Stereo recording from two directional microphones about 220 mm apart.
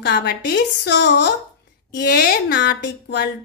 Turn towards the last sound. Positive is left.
turn(degrees=50)  # may be behind; listen again after turning